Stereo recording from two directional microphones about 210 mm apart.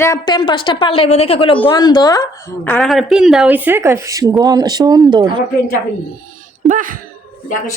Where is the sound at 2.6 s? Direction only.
5° left (ahead or behind); by 5.4 s 20° right (ahead or behind).